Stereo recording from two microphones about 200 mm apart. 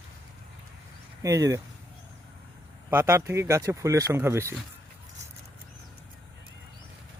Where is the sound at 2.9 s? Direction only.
15° right (ahead or behind).